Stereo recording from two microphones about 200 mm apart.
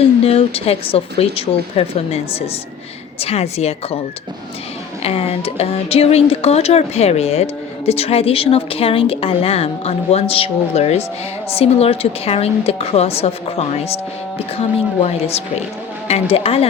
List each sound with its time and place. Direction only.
0.3 s speech: 30° left (ahead or behind)
5.0 s speech: 30° left (ahead or behind)